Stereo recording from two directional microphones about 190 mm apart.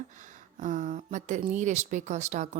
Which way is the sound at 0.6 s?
40° right (ahead or behind).